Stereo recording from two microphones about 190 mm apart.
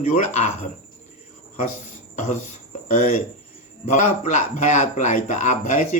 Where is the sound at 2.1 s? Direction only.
40° left (ahead or behind).